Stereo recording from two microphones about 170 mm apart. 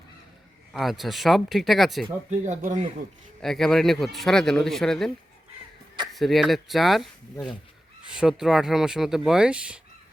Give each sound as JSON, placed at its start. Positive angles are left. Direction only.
{"t": 0.7, "sound": "speech", "side_deg": 0}
{"t": 2.4, "sound": "speech", "side_deg": -45}
{"t": 3.4, "sound": "speech", "side_deg": 0}
{"t": 6.1, "sound": "speech", "side_deg": 0}